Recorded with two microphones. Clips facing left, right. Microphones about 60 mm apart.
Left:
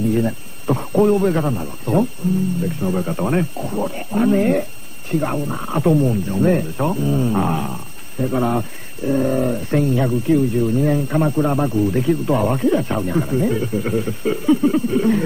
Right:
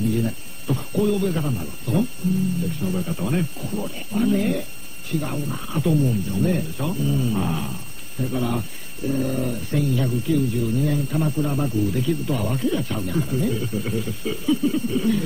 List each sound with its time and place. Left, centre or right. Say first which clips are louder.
0.1 s speech: left 5 dB; left